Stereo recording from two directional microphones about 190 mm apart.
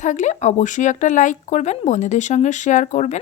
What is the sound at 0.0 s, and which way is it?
Speech, 40° left (ahead or behind).